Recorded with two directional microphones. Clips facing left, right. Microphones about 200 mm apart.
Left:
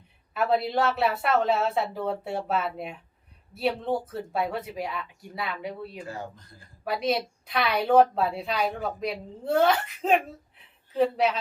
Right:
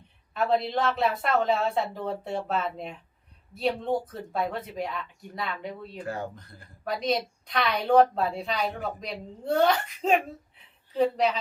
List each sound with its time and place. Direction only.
0.3 s speech: 5° left (ahead or behind)
6.0 s speech: 60° right (ahead or behind)
6.8 s a woman's voice: 5° left (ahead or behind)